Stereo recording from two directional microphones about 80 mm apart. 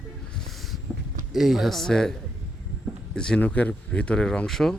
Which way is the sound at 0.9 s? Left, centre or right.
Centre.